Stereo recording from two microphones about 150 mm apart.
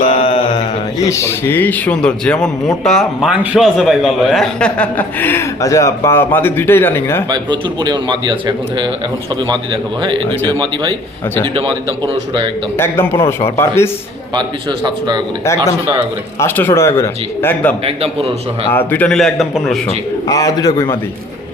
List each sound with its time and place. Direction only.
0.1 s a man's voice: 35° left (ahead or behind); by 7.3 s 15° left (ahead or behind)
7.3 s a man's voice: 30° right (ahead or behind)
11.4 s a man's voice: 35° right (ahead or behind)
12.7 s a man's voice: 15° left (ahead or behind)
14.3 s a man's voice: 30° right (ahead or behind)
16.4 s a man's voice: 15° left (ahead or behind)
17.8 s a man's voice: 40° right (ahead or behind)
18.7 s a man's voice: 15° left (ahead or behind)
20.2 s a man's voice: 25° left (ahead or behind)